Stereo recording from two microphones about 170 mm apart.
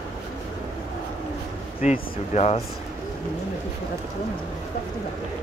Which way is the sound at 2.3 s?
40° left (ahead or behind).